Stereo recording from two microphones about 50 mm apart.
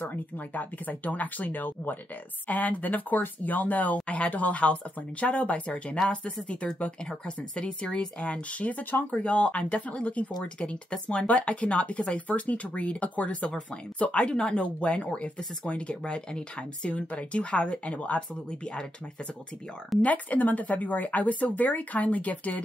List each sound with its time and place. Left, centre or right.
0.0 s speech: left
7.1 s speech: centre
20.0 s speech: left